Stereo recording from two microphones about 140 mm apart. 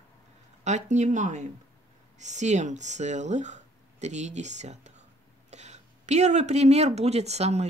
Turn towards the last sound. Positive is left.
turn(degrees=-50)  # may be behind; listen again after turning